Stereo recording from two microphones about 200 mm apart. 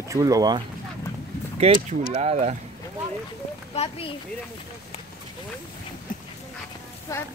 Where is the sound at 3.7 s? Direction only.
30° left (ahead or behind).